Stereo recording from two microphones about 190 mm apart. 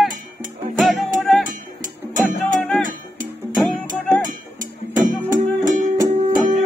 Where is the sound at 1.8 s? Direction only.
45° right (ahead or behind).